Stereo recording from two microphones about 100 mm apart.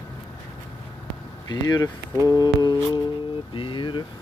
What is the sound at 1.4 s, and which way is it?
Speech, 40° left (ahead or behind).